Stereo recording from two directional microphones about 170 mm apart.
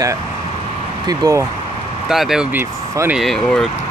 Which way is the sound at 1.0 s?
20° right (ahead or behind).